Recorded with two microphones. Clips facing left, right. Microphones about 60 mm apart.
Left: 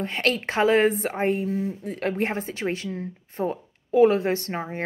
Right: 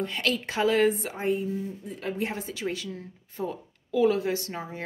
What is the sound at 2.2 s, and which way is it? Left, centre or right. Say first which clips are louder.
A woman's voice: left 4 dB; left.